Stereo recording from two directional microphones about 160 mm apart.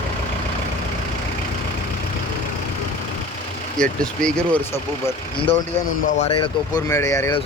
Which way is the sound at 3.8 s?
5° left (ahead or behind).